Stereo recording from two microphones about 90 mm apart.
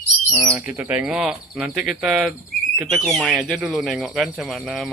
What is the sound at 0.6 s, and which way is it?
Speech, 15° right (ahead or behind).